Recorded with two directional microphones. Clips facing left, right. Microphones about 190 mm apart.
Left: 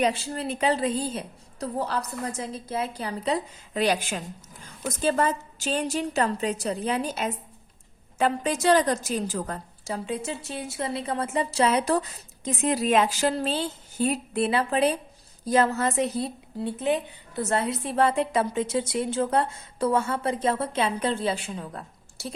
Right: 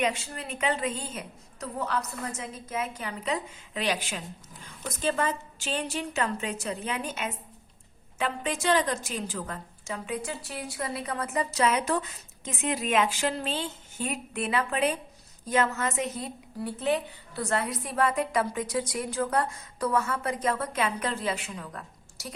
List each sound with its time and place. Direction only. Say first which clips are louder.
0.0 s a woman's voice: left 4 dB; 35° left (ahead or behind)